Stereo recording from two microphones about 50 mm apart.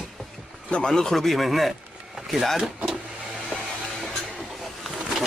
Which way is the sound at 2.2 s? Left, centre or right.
Centre.